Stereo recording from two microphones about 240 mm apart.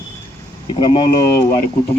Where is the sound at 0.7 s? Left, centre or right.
Centre.